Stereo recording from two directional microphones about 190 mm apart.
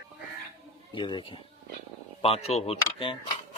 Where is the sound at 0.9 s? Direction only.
25° left (ahead or behind).